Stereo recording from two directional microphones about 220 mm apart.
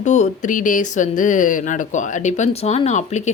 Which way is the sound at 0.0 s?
35° left (ahead or behind).